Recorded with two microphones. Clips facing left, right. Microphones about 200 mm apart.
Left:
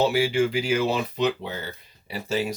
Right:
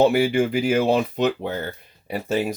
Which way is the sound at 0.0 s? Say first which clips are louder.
Right 4 dB; 55° right (ahead or behind).